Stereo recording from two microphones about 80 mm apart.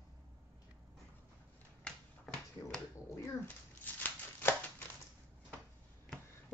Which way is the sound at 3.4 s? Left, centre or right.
Left.